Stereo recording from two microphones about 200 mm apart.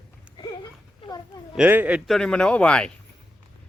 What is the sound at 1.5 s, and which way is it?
Speech, 5° right (ahead or behind).